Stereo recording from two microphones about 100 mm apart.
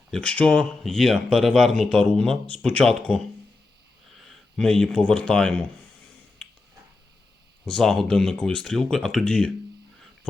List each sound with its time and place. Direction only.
0.1 s speech: 10° left (ahead or behind)
4.3 s a sound: 5° left (ahead or behind)
4.9 s speech: 5° left (ahead or behind)
7.7 s speech: 5° left (ahead or behind)